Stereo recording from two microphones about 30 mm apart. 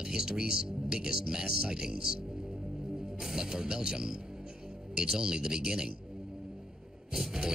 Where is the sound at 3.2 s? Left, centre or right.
Centre.